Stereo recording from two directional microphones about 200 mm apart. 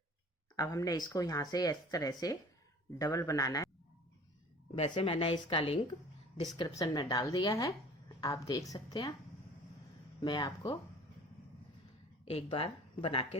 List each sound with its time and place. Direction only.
0.5 s speech: 20° left (ahead or behind)
4.7 s a woman's voice: 30° left (ahead or behind)
10.2 s a woman's voice: 20° left (ahead or behind)
12.2 s speech: 30° left (ahead or behind)